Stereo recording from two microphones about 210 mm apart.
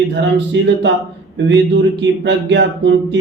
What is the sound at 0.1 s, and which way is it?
Speech, 55° right (ahead or behind).